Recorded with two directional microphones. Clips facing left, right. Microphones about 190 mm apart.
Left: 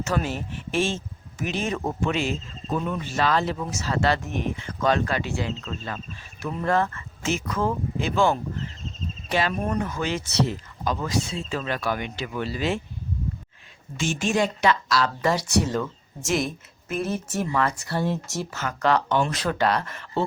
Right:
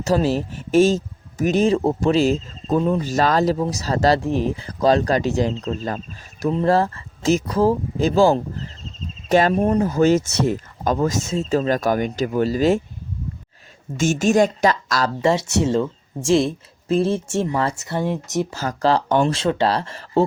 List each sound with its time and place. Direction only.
0.0 s speech: 35° right (ahead or behind)
13.9 s speech: 45° right (ahead or behind)
15.2 s speech: 25° right (ahead or behind)
18.5 s speech: 30° right (ahead or behind)
19.0 s speech: 45° right (ahead or behind)
19.3 s speech: 25° right (ahead or behind)